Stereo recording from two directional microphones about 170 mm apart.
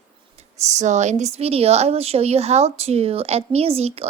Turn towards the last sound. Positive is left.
turn(degrees=-35)  # may be behind; listen again after turning